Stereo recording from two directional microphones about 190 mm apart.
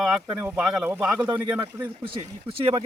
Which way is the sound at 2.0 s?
30° right (ahead or behind).